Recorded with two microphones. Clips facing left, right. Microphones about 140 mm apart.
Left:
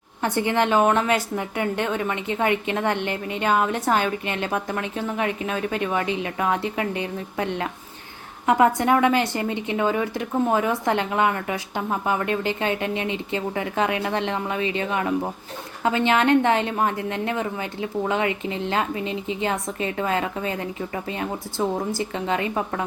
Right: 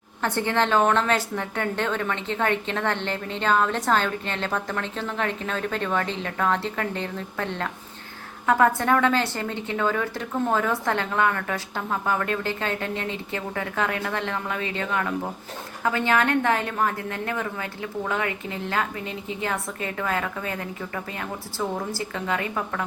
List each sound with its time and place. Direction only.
0.2 s a woman's voice: 15° left (ahead or behind)